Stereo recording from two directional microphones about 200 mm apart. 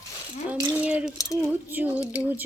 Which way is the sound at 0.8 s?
5° right (ahead or behind).